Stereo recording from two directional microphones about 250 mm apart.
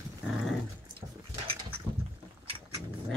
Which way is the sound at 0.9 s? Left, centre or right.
Right.